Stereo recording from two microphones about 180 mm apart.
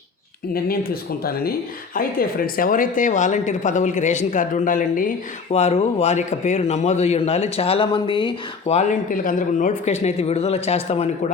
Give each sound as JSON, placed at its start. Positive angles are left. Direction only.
{"t": 1.2, "sound": "speech", "side_deg": 55}